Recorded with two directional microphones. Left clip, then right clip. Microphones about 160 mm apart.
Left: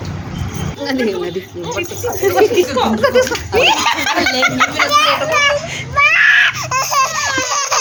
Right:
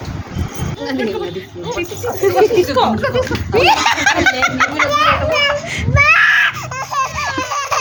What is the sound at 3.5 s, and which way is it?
Speech, 10° right (ahead or behind).